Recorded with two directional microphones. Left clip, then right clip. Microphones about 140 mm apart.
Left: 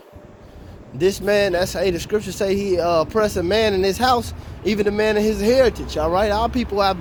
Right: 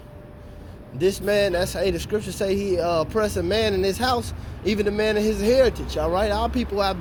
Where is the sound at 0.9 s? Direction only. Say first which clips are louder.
Left 3 dB; 55° left (ahead or behind).